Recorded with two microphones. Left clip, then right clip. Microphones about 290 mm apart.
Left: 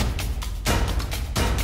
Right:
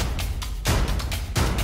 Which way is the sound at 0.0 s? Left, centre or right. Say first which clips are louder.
Left 1 dB; centre.